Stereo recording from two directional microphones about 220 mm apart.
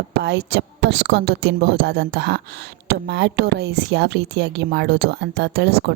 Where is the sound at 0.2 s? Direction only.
50° right (ahead or behind).